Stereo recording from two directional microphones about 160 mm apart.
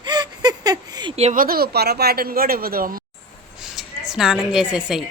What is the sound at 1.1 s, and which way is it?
Speech, 40° right (ahead or behind).